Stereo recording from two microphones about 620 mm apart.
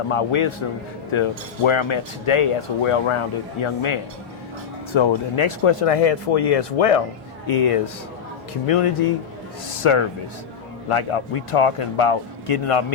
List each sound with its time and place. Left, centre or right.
0.1 s speech: left
7.4 s speech: left
8.6 s speech: left